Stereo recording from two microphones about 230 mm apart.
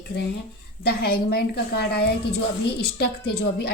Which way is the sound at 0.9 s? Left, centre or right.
Left.